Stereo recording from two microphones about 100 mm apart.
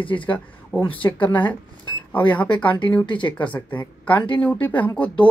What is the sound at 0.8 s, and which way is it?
Speech, 60° left (ahead or behind).